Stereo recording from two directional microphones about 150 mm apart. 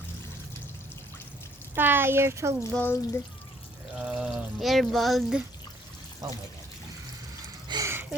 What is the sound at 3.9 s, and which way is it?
Speech, 5° right (ahead or behind).